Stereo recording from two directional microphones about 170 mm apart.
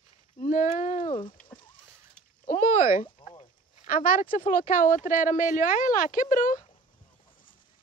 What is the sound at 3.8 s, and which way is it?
Speech, 55° left (ahead or behind).